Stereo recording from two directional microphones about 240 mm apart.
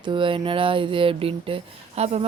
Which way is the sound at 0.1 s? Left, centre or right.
Right.